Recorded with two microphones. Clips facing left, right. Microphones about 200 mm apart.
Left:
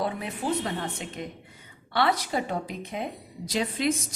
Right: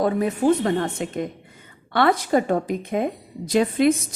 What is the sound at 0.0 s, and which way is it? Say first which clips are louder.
A woman's voice: right 10 dB; 45° right (ahead or behind).